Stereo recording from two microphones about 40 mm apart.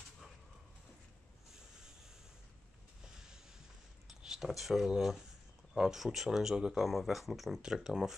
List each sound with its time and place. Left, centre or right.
4.1 s speech: centre
7.6 s speech: centre